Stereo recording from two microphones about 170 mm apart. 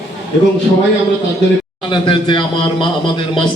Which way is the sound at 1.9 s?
30° left (ahead or behind).